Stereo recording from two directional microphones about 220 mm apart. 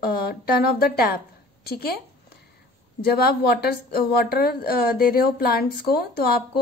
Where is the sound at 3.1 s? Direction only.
45° left (ahead or behind).